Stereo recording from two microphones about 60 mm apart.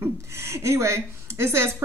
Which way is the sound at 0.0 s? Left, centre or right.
Right.